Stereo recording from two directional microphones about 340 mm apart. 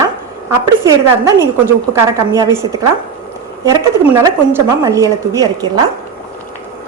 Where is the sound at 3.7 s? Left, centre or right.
Centre.